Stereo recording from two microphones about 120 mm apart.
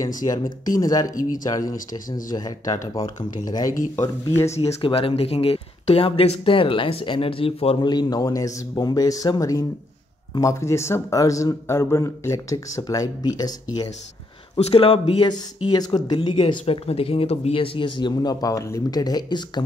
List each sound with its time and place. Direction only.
0.2 s a man's voice: 30° left (ahead or behind)
4.8 s a man's voice: 50° left (ahead or behind); by 13.8 s 35° left (ahead or behind)
14.6 s speech: 55° left (ahead or behind)
15.2 s speech: 35° left (ahead or behind)